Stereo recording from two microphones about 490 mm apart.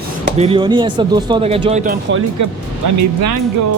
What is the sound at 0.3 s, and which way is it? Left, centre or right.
Speech, centre.